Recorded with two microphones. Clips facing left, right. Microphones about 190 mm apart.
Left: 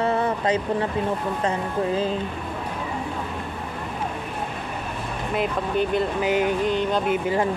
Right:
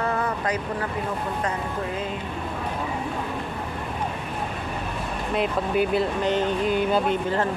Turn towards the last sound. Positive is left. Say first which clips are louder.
# left 1 dB
turn(degrees=10)  # may be behind; listen again after turning